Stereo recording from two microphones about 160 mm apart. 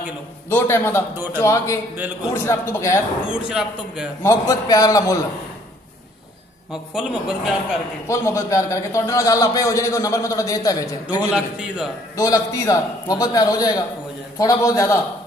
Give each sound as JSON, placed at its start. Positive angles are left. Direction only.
{"t": 0.5, "sound": "a man's voice", "side_deg": 15}
{"t": 1.1, "sound": "a man's voice", "side_deg": -10}
{"t": 1.4, "sound": "a man's voice", "side_deg": 20}
{"t": 3.3, "sound": "a man's voice", "side_deg": -5}
{"t": 4.2, "sound": "a man's voice", "side_deg": 20}
{"t": 6.7, "sound": "a man's voice", "side_deg": -5}
{"t": 8.1, "sound": "a man's voice", "side_deg": 20}
{"t": 11.1, "sound": "a man's voice", "side_deg": -5}
{"t": 12.2, "sound": "a man's voice", "side_deg": 20}